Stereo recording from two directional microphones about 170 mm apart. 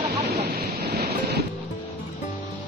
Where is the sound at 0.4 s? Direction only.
80° right.